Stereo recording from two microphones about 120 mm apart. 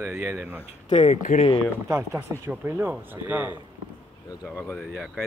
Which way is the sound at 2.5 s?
15° right (ahead or behind).